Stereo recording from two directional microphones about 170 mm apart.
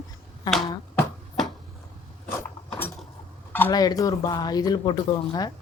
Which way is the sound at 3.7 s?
20° left (ahead or behind).